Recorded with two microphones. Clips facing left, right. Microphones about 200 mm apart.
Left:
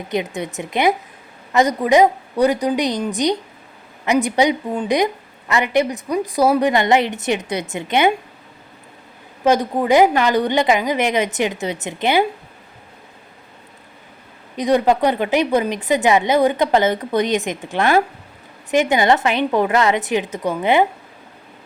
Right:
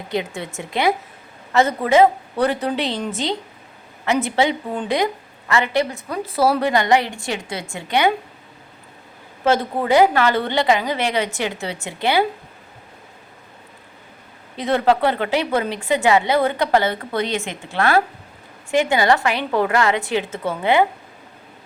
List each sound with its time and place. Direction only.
0.1 s a woman's voice: 20° left (ahead or behind)
9.4 s a woman's voice: 15° left (ahead or behind)
14.5 s a woman's voice: 15° left (ahead or behind)